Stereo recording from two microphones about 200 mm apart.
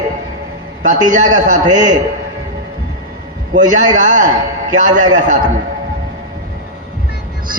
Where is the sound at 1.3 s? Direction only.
40° right (ahead or behind).